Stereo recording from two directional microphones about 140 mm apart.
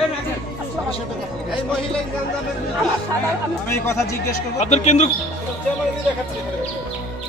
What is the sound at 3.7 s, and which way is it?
Speech, 20° left (ahead or behind).